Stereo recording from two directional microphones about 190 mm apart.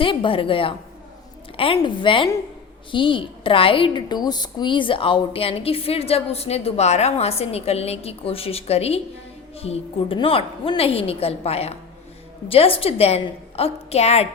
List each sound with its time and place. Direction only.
0.0 s a woman's voice: 25° left (ahead or behind)